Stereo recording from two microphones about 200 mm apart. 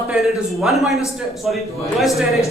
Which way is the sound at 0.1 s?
5° right (ahead or behind).